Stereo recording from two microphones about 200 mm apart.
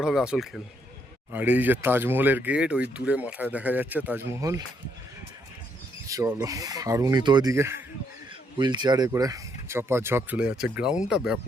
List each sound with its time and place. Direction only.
0.0 s speech: centre (ahead or behind)
6.1 s speech: 15° right (ahead or behind)